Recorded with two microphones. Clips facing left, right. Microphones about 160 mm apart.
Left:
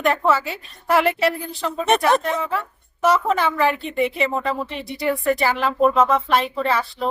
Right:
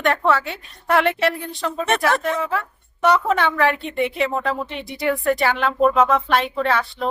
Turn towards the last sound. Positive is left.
turn(degrees=0)  # may be behind; listen again after turning